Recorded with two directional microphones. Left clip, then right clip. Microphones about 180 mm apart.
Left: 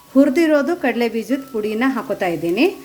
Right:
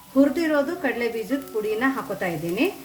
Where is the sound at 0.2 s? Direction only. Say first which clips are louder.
Left 6 dB; 50° left (ahead or behind).